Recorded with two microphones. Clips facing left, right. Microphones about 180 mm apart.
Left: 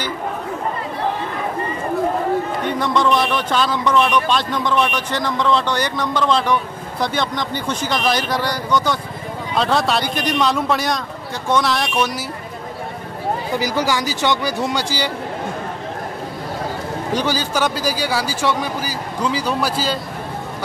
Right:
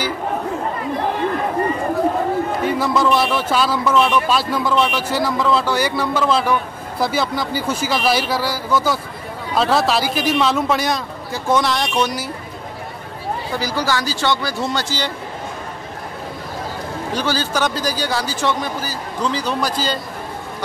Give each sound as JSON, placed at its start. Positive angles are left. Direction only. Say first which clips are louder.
{"t": 2.6, "sound": "a man's voice", "louder": "right 3 dB", "side_deg": -5}
{"t": 13.6, "sound": "speech", "louder": "even", "side_deg": 15}
{"t": 17.1, "sound": "speech", "louder": "left 1 dB", "side_deg": 15}